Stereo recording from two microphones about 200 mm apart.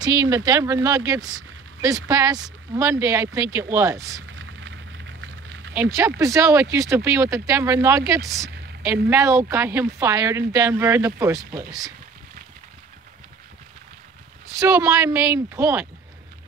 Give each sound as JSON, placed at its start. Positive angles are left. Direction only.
{"t": 0.0, "sound": "speech", "side_deg": -15}
{"t": 4.3, "sound": "a sound", "side_deg": -70}
{"t": 5.8, "sound": "speech", "side_deg": -15}
{"t": 14.6, "sound": "speech", "side_deg": -15}